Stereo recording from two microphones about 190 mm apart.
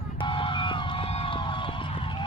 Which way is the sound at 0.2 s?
25° left (ahead or behind).